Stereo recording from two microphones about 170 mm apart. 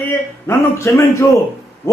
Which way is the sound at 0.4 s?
20° left (ahead or behind).